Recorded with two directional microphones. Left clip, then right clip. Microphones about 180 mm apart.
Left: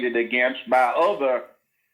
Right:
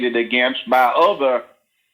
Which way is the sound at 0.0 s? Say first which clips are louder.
Right 4 dB; 40° right (ahead or behind).